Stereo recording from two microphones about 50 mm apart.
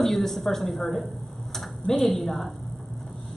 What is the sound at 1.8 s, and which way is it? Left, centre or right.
Speech, centre.